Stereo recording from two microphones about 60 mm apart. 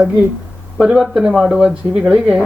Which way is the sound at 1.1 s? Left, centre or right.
Centre.